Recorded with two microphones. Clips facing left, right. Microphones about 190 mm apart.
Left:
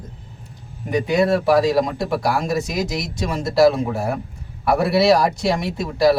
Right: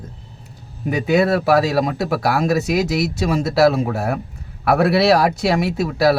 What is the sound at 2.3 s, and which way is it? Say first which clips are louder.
Speech: right 7 dB; 65° right (ahead or behind).